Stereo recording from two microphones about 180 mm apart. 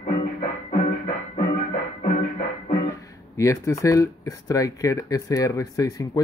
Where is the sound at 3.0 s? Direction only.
15° left (ahead or behind).